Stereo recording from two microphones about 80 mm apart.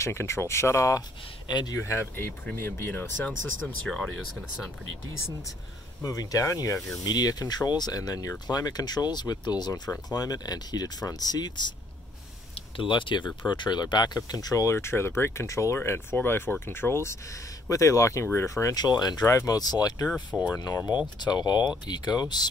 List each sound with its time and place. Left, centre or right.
0.0 s speech: left
3.3 s speech: centre
6.0 s speech: left
7.1 s speech: left
12.7 s speech: left
18.8 s speech: left
19.2 s speech: left
19.5 s speech: left
21.2 s speech: left